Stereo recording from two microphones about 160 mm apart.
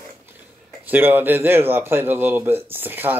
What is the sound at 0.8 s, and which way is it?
Speech, 10° right (ahead or behind).